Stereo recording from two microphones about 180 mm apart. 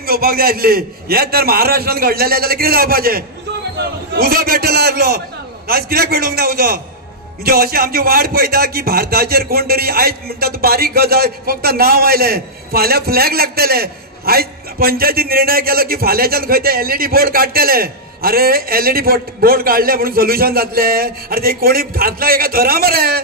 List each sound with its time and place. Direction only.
0.0 s a man's voice: 55° right (ahead or behind)